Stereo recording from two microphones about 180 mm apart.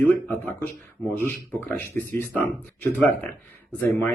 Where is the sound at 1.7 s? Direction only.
10° left (ahead or behind).